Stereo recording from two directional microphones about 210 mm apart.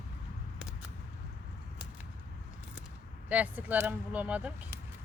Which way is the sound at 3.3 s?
5° right (ahead or behind).